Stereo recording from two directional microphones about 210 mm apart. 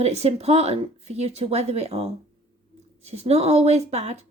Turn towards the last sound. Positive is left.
turn(degrees=-30)  # may be behind; listen again after turning